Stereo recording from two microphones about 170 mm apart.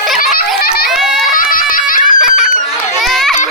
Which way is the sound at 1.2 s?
55° left (ahead or behind).